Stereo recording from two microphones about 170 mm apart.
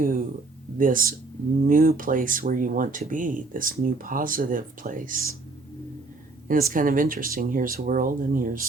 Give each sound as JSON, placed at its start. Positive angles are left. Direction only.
{"t": 0.0, "sound": "speech", "side_deg": -55}
{"t": 6.5, "sound": "speech", "side_deg": -55}